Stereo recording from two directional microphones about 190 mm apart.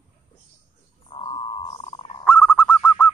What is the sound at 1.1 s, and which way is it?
Wild animals, 30° left (ahead or behind).